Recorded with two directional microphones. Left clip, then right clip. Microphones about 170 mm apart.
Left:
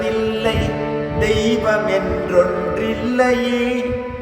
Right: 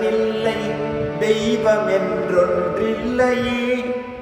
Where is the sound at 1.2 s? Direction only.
25° left (ahead or behind).